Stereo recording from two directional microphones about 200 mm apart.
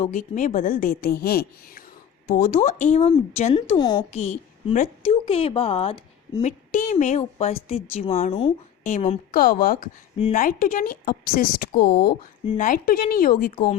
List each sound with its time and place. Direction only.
0.0 s a woman's voice: 40° left (ahead or behind)
3.8 s a woman's voice: 20° left (ahead or behind)
4.1 s a woman's voice: 35° left (ahead or behind)
6.7 s speech: 40° left (ahead or behind)
9.3 s a woman's voice: 50° left (ahead or behind)